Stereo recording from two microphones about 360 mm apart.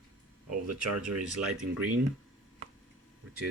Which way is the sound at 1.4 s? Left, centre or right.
Centre.